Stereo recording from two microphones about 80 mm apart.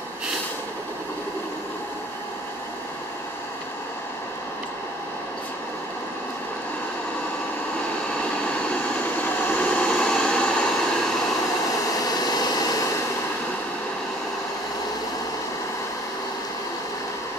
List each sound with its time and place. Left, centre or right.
9.2 s vehicle: centre
12.0 s vehicle: left